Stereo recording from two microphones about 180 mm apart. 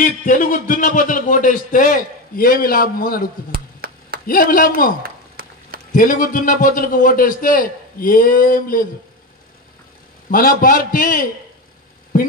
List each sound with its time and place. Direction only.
0.0 s a man's voice: 50° left (ahead or behind)
3.8 s a sound: 55° right (ahead or behind)
4.3 s a man's voice: 50° left (ahead or behind)
5.9 s a man's voice: 50° left (ahead or behind)
10.3 s a man's voice: 50° left (ahead or behind)